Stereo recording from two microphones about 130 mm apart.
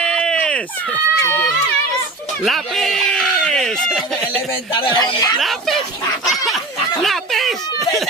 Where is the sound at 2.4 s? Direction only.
Centre (ahead or behind).